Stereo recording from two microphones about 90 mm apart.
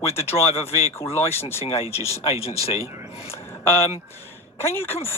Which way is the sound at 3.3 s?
25° left (ahead or behind).